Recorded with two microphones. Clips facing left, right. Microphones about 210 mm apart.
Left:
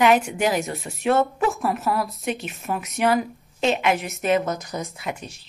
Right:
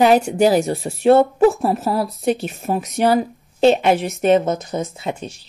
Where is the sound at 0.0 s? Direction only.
35° right (ahead or behind).